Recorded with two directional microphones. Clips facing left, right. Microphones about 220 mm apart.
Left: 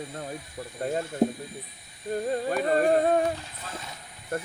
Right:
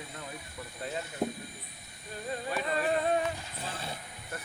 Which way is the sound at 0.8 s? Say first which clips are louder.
Left 9 dB; 50° left (ahead or behind).